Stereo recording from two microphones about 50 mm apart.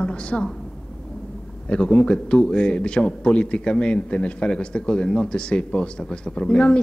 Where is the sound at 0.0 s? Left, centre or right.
Left.